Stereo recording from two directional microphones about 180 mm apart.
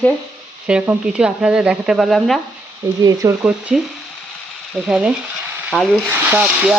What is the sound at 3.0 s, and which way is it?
Speech, 20° right (ahead or behind).